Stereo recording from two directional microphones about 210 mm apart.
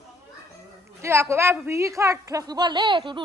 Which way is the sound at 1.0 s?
15° right (ahead or behind).